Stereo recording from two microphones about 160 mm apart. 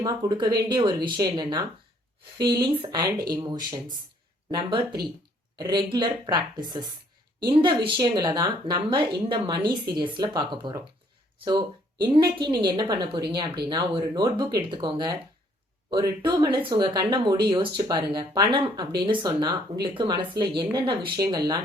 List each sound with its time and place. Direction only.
0.0 s speech: 25° right (ahead or behind)